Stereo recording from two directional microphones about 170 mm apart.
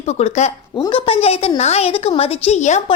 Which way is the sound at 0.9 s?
35° left (ahead or behind).